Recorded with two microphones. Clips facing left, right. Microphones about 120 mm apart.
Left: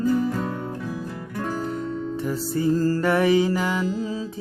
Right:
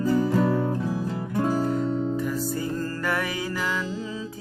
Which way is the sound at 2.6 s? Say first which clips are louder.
Left 8 dB; 25° left (ahead or behind).